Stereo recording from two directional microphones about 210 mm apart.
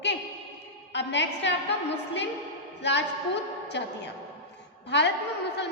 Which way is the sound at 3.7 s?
55° left (ahead or behind).